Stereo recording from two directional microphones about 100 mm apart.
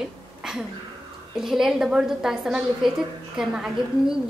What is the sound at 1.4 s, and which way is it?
A woman's voice, 5° right (ahead or behind).